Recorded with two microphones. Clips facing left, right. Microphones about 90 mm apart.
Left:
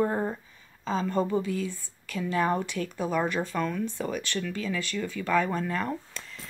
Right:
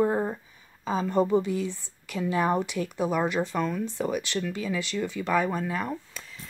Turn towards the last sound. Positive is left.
turn(degrees=-5)  # may be behind; listen again after turning